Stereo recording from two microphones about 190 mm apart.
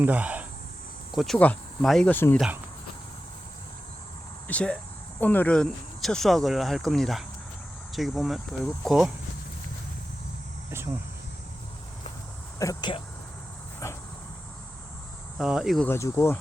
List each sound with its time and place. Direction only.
0.0 s speech: 10° right (ahead or behind); by 2.4 s 10° left (ahead or behind)
4.4 s speech: 5° left (ahead or behind)
12.5 s speech: 15° left (ahead or behind)
15.4 s speech: centre (ahead or behind)
15.9 s speech: 15° left (ahead or behind)